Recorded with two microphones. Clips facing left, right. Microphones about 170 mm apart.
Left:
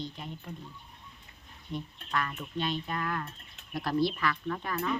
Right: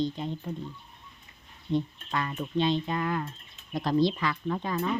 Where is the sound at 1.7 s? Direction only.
20° right (ahead or behind).